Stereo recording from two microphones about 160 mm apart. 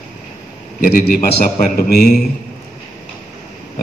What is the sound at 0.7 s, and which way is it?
A man's voice, 65° left (ahead or behind).